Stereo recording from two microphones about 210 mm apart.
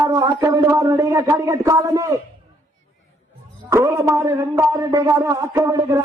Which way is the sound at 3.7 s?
15° right (ahead or behind).